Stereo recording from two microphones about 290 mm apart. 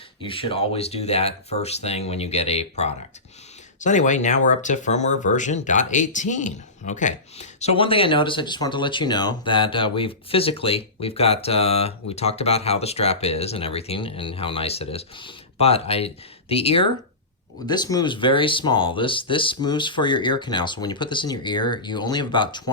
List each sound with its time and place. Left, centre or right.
0.2 s speech: centre